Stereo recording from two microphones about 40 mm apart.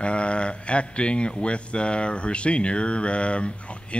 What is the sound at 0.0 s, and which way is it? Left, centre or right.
Speech, left.